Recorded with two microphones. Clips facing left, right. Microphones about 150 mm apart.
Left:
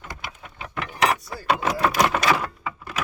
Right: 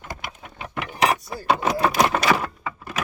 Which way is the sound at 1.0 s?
25° right (ahead or behind).